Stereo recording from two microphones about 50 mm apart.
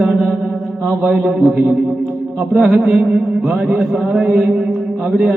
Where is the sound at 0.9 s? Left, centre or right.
Centre.